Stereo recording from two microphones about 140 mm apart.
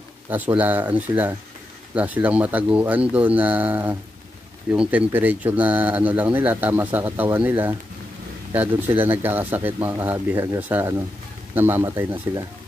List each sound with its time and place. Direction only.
0.6 s speech: 15° right (ahead or behind)